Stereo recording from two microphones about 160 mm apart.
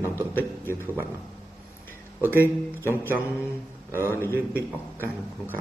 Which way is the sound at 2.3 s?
15° left (ahead or behind).